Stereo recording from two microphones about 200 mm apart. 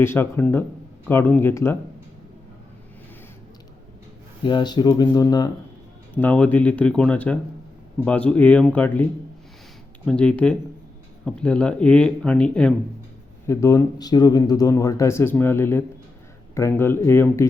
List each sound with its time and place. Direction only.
0.0 s speech: 10° left (ahead or behind)
4.4 s speech: 20° left (ahead or behind)
6.1 s speech: 5° left (ahead or behind)
10.1 s speech: 5° left (ahead or behind)